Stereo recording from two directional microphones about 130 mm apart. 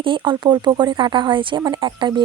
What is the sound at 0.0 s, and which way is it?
Speech, 40° right (ahead or behind).